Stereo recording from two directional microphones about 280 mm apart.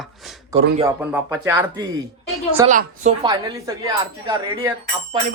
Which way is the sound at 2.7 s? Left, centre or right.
Right.